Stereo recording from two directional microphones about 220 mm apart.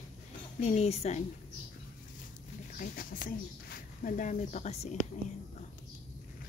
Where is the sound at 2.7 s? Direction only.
40° left (ahead or behind).